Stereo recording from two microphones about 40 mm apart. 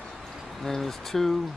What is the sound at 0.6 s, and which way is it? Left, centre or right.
Speech, centre.